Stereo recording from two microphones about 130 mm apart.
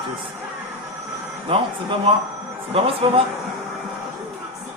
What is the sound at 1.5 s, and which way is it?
Speech, 40° right (ahead or behind).